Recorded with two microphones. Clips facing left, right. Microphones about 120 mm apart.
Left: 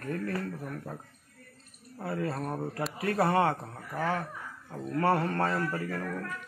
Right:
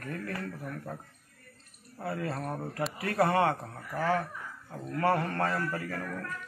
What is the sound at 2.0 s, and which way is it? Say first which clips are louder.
A man's voice: left 1 dB; 20° left (ahead or behind).